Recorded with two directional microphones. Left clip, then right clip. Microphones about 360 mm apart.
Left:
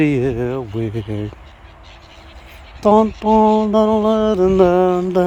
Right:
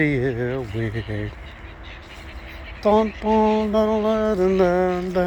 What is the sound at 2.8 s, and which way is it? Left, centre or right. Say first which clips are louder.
Speech: left 5 dB; left.